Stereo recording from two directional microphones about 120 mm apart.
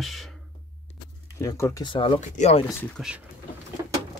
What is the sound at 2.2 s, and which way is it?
Speech, 80° left.